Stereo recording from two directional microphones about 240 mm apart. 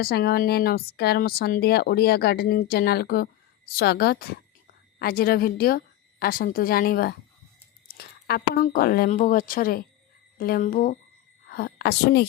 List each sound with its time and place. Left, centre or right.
0.0 s a woman's voice: left